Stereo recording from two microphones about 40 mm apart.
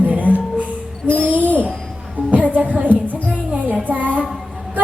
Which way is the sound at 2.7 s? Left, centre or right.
Right.